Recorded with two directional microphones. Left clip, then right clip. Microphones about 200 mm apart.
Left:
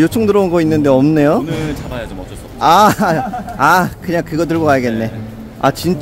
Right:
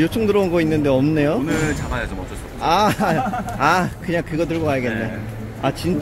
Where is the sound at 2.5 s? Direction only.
30° left (ahead or behind).